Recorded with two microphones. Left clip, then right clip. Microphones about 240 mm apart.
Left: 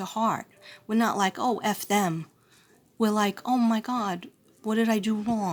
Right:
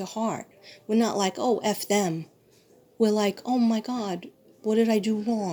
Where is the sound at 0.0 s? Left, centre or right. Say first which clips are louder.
Left 3 dB; left.